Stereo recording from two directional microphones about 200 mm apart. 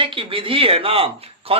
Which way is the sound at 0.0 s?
25° right (ahead or behind).